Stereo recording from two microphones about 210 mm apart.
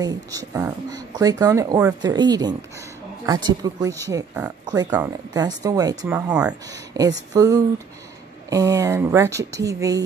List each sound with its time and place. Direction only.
0.0 s speech: 15° right (ahead or behind)
6.9 s speech: 15° right (ahead or behind)